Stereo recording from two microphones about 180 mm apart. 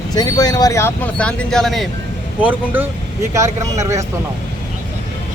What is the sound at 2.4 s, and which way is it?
Speech, 10° right (ahead or behind).